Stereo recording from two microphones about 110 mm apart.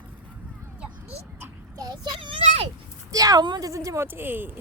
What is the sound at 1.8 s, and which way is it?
Children playing, 40° right (ahead or behind).